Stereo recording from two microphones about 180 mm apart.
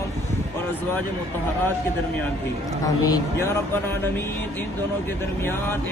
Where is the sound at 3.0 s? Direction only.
20° left (ahead or behind).